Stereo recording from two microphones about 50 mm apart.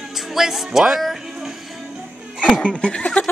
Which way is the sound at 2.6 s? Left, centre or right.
Left.